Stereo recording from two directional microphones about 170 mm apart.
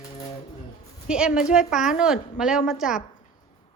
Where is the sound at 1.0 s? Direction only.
5° right (ahead or behind).